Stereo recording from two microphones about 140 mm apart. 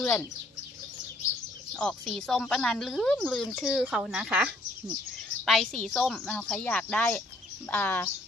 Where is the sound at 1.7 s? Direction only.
5° left (ahead or behind).